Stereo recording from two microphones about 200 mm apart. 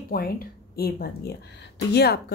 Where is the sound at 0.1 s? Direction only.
50° left (ahead or behind).